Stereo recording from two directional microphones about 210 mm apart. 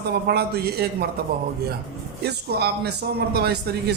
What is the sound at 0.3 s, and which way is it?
Speech, 50° right (ahead or behind).